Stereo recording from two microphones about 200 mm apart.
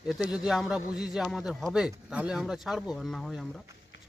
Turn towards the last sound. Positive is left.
turn(degrees=0)  # may be behind; listen again after turning